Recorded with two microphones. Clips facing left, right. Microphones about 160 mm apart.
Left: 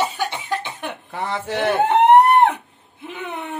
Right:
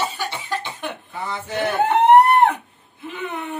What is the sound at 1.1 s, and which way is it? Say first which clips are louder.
Speech: left 7 dB; 80° left.